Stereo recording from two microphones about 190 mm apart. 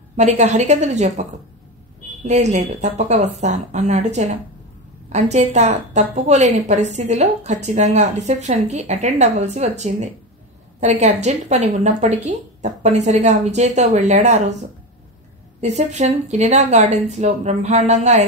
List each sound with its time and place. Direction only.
0.1 s a woman's voice: 35° right (ahead or behind)
2.2 s a woman's voice: 35° right (ahead or behind)
15.6 s a woman's voice: 35° right (ahead or behind)